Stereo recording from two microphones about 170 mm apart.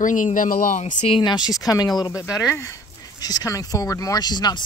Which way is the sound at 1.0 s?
30° left (ahead or behind).